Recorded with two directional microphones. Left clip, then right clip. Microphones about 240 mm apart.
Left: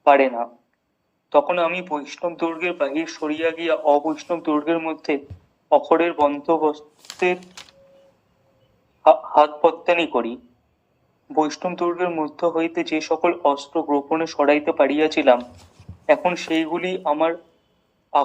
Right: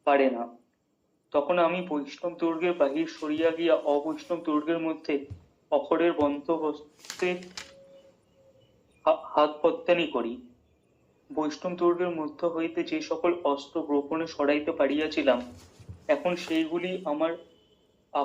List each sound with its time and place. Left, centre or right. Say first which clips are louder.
0.0 s speech: left 8 dB; left
9.0 s speech: left 9 dB; left